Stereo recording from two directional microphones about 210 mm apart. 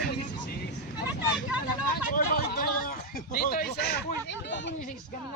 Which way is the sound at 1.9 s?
45° left (ahead or behind).